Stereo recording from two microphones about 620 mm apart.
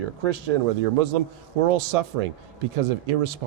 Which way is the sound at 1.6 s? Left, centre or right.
Right.